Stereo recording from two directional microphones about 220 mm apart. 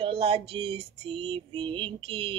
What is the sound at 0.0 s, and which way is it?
Female singing, 25° right (ahead or behind).